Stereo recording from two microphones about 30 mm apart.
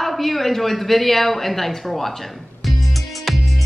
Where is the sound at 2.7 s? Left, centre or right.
Centre.